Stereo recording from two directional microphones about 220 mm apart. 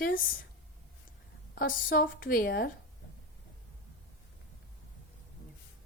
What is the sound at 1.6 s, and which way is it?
A woman's voice, 40° left (ahead or behind).